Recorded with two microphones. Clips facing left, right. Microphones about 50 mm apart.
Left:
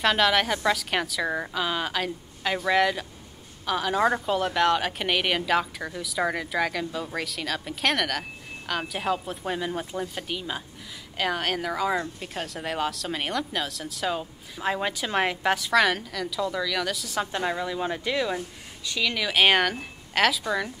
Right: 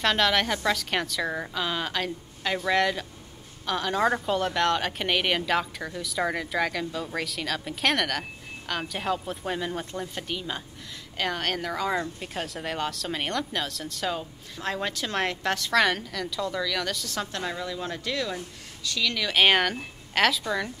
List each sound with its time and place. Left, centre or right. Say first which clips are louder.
0.0 s a woman's voice: left 2 dB; centre
19.3 s a woman's voice: even; centre